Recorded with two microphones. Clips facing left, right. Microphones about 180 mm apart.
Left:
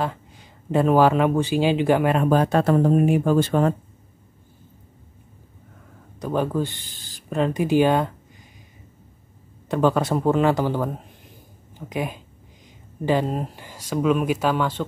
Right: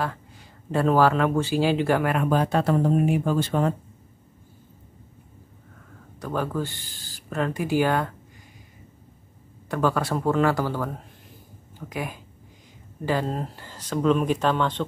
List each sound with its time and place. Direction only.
0.0 s speech: 20° left (ahead or behind)
2.2 s speech: 50° left (ahead or behind)
6.1 s speech: 20° left (ahead or behind)
9.7 s speech: 20° left (ahead or behind)